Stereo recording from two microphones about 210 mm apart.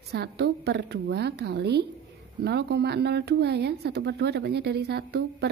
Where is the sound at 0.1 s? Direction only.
50° right (ahead or behind).